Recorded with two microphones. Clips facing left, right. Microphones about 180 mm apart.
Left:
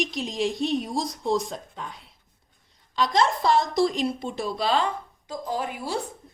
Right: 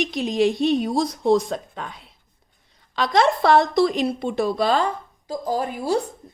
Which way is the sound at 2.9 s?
65° right (ahead or behind).